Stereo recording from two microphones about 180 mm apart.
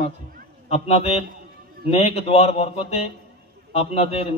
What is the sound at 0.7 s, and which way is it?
A man's voice, 35° left (ahead or behind).